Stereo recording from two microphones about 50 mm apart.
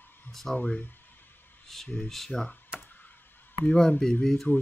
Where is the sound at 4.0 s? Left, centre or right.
Centre.